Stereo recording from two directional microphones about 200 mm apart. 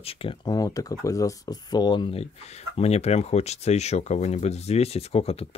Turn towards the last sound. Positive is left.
turn(degrees=30)  # may be behind; listen again after turning